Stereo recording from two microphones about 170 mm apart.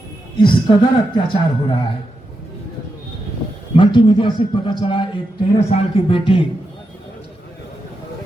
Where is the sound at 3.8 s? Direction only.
30° left (ahead or behind).